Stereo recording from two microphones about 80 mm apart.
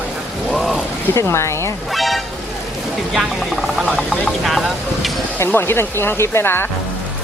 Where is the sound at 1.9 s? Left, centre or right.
Centre.